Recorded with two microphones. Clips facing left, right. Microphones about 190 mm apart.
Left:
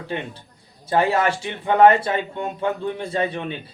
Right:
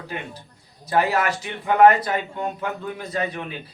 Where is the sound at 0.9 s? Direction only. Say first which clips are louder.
Left 2 dB; 30° left (ahead or behind).